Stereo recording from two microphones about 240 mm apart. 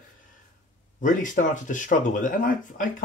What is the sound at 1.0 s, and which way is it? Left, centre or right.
Speech, left.